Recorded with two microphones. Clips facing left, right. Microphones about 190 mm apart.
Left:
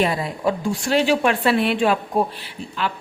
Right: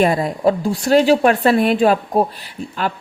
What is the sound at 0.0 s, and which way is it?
A woman's voice, 45° right (ahead or behind).